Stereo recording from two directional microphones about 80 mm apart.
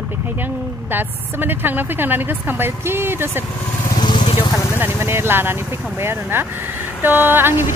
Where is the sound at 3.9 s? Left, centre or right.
Left.